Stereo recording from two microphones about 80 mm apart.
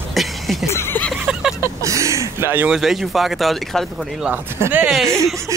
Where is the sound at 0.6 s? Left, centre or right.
Left.